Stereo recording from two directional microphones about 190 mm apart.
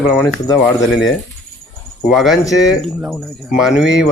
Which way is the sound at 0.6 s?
Centre (ahead or behind).